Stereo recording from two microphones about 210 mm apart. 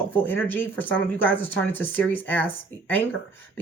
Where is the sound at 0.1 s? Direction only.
10° left (ahead or behind).